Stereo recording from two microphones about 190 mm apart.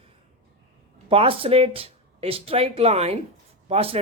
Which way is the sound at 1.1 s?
30° right (ahead or behind).